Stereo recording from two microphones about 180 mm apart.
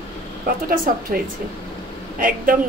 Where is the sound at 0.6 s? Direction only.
55° right (ahead or behind).